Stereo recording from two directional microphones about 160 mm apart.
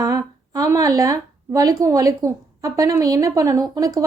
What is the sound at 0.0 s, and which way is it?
A woman's voice, 20° right (ahead or behind).